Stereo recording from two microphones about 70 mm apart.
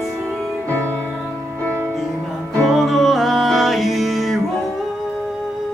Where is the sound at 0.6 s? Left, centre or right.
Left.